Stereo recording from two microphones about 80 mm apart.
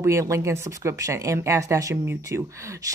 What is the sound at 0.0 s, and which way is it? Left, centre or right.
Speech, right.